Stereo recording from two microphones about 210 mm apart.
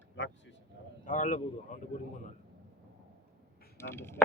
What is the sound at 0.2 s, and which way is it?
Speech, 60° left (ahead or behind).